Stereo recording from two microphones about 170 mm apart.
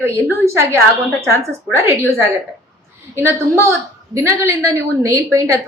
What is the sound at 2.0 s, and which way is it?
A woman's voice, 15° right (ahead or behind).